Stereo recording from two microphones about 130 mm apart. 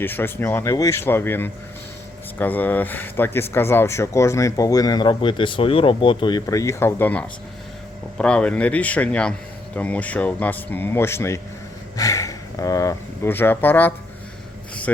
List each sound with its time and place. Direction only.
0.0 s speech: 15° left (ahead or behind)